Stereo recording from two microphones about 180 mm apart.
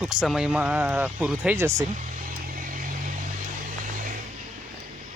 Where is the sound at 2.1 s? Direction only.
50° right (ahead or behind).